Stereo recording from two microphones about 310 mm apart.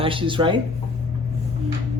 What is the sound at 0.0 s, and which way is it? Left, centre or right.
Speech, centre.